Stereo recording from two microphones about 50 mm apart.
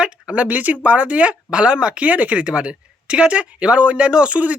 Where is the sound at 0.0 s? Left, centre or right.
Right.